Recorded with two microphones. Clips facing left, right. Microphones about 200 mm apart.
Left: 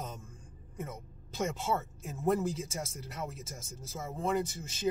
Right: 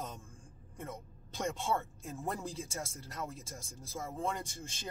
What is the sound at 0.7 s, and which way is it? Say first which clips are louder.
Speech: left 3 dB; 5° left (ahead or behind).